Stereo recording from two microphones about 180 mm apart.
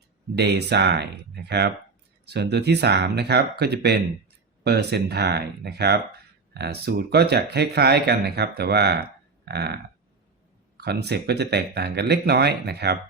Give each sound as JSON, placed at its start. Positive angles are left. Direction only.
{"t": 0.3, "sound": "speech", "side_deg": -65}